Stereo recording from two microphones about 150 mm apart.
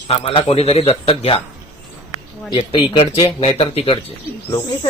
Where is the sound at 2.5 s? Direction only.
35° left (ahead or behind).